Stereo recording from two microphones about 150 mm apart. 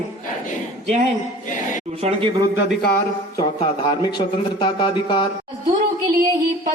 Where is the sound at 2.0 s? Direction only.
45° right (ahead or behind).